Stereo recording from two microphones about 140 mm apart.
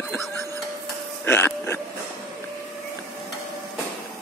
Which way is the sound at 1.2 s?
15° left (ahead or behind).